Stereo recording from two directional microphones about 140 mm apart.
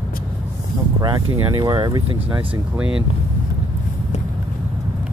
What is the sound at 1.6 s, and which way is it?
Speech, 30° right (ahead or behind).